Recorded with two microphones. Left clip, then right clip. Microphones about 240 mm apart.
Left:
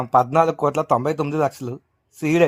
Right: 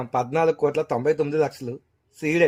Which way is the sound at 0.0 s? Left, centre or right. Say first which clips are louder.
Left 5 dB; left.